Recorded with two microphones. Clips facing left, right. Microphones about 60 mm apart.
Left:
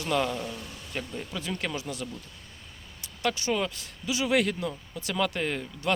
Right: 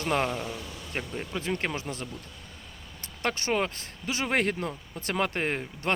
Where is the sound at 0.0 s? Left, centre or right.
Right.